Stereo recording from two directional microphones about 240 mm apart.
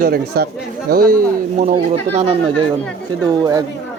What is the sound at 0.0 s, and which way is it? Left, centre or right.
Speech, right.